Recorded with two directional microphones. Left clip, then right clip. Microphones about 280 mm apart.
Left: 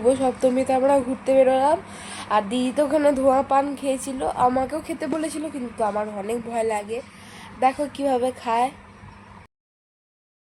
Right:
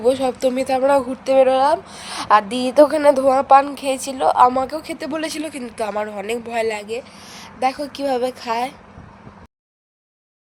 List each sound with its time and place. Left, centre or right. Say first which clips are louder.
0.0 s a woman's voice: right 2 dB; right